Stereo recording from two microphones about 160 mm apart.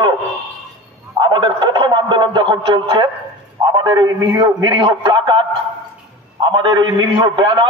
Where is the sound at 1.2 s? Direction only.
30° right (ahead or behind).